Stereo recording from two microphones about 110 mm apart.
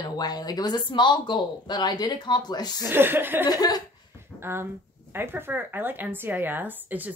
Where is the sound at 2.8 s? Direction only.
20° right (ahead or behind).